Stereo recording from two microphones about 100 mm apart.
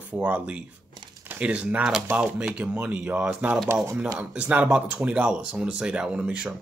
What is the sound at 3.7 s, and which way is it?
Speech, 30° right (ahead or behind).